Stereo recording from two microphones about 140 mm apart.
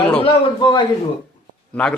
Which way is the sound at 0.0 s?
10° left (ahead or behind).